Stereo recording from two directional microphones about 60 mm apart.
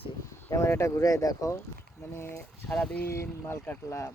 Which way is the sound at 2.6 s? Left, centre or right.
Left.